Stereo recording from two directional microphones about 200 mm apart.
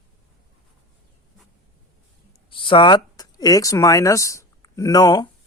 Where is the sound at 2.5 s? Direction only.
25° left (ahead or behind).